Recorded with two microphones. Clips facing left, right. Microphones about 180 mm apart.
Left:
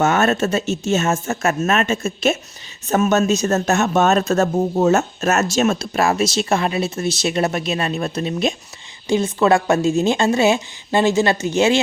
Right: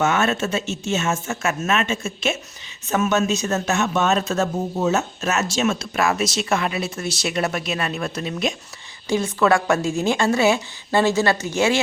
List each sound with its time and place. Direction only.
0.0 s speech: 40° left (ahead or behind)
5.8 s speech: 30° left (ahead or behind)